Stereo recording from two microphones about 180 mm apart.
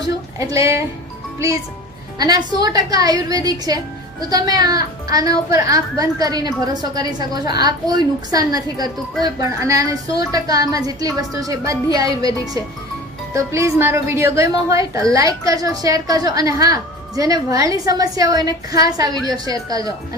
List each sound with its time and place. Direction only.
0.3 s a woman's voice: 15° right (ahead or behind)
2.1 s a woman's voice: 20° right (ahead or behind)
13.3 s a woman's voice: 15° right (ahead or behind)